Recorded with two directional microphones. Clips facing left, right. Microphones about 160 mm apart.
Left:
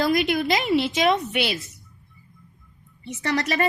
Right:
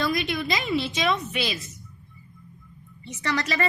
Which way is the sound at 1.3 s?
75° left (ahead or behind).